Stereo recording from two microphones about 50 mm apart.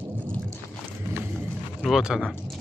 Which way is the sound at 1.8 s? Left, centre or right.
Centre.